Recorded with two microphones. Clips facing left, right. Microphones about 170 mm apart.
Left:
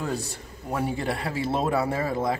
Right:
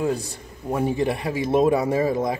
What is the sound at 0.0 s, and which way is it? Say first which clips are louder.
A man's voice: right 6 dB; 15° right (ahead or behind).